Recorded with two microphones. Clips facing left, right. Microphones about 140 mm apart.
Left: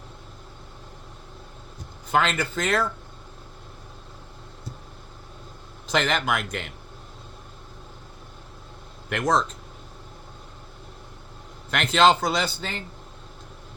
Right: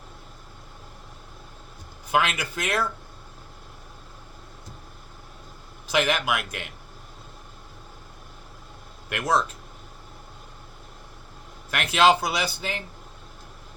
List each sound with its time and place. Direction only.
2.1 s speech: 10° right (ahead or behind)
5.9 s speech: 10° right (ahead or behind)
9.0 s speech: 5° right (ahead or behind)
11.7 s speech: 5° right (ahead or behind)